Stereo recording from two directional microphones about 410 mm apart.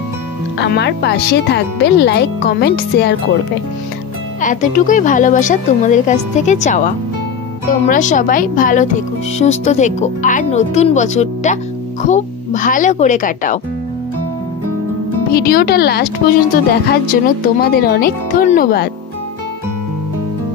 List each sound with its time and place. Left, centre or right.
0.6 s speech: left
4.4 s a woman's voice: centre
15.3 s speech: left